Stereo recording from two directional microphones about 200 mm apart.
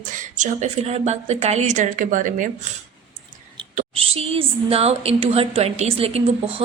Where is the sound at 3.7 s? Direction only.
30° right (ahead or behind).